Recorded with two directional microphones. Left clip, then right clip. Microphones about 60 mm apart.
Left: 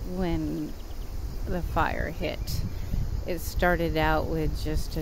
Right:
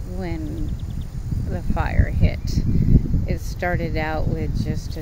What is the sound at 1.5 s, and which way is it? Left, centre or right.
Speech, left.